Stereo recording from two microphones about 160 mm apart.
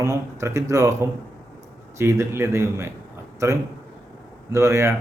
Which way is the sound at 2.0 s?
15° right (ahead or behind).